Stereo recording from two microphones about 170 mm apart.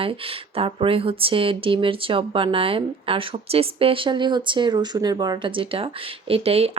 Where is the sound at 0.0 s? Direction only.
35° right (ahead or behind).